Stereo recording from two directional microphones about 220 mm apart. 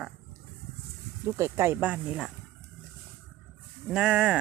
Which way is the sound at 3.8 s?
5° right (ahead or behind).